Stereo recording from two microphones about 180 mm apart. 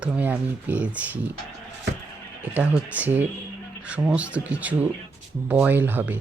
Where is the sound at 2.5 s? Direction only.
10° right (ahead or behind).